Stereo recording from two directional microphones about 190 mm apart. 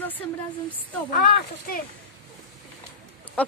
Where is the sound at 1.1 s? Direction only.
50° left (ahead or behind).